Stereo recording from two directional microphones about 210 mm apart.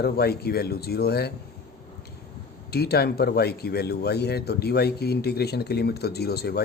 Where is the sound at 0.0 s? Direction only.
50° left (ahead or behind).